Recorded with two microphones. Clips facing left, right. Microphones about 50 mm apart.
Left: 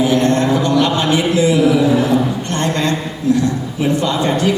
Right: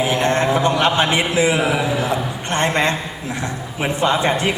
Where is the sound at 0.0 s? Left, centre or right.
Right.